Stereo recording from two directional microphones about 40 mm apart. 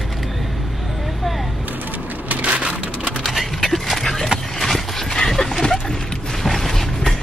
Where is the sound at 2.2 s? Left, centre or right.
Right.